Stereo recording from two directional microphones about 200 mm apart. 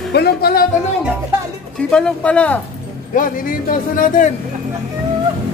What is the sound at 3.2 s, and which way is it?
Speech, 45° left (ahead or behind).